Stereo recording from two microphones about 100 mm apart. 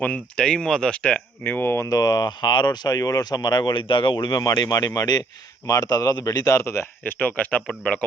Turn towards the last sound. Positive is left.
turn(degrees=10)  # may be behind; listen again after turning